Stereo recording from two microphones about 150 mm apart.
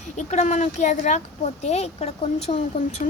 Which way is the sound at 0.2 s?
50° left (ahead or behind).